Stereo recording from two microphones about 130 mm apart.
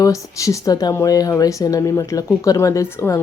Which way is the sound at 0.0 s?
25° left (ahead or behind).